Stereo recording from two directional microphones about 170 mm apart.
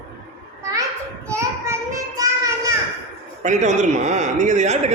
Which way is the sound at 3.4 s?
45° right (ahead or behind).